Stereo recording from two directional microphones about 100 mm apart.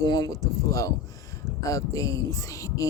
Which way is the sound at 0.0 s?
40° left (ahead or behind).